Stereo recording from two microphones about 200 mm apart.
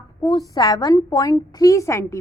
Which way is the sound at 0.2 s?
20° left (ahead or behind).